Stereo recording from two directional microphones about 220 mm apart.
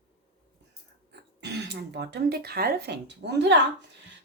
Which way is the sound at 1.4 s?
50° right (ahead or behind).